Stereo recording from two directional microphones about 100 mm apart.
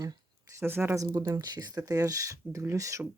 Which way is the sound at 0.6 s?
20° right (ahead or behind).